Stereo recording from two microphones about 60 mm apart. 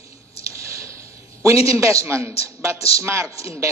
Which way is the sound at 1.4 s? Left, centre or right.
Right.